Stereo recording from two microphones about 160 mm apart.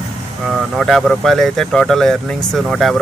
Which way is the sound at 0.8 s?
Centre (ahead or behind).